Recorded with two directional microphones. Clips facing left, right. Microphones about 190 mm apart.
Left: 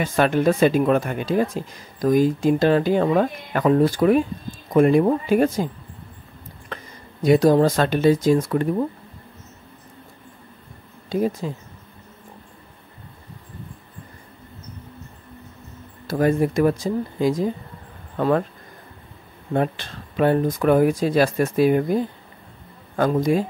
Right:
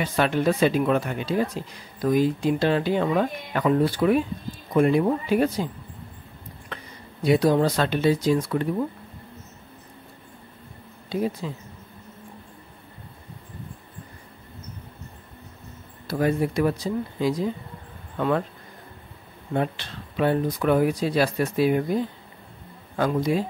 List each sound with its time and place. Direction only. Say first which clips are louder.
0.0 s speech: left 4 dB; 45° left (ahead or behind)
6.7 s speech: left 3 dB; 45° left (ahead or behind)
11.1 s speech: left 4 dB; 45° left (ahead or behind)
16.1 s speech: left 4 dB; 45° left (ahead or behind)
19.5 s speech: left 3 dB; 50° left (ahead or behind)